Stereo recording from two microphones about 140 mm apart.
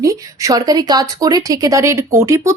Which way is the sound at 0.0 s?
25° right (ahead or behind).